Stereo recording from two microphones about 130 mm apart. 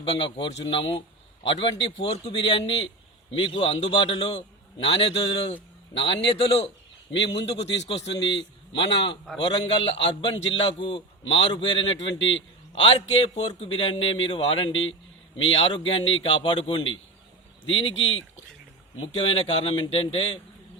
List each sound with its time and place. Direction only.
0.0 s a man's voice: 40° left (ahead or behind)
17.8 s a man's voice: 45° left (ahead or behind)